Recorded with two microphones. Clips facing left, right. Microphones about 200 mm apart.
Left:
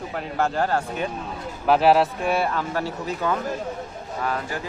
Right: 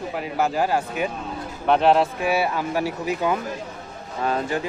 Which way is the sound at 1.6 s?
5° left (ahead or behind).